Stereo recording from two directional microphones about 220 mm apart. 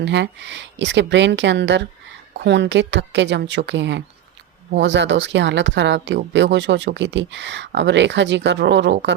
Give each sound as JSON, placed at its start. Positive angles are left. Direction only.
{"t": 0.0, "sound": "speech", "side_deg": -55}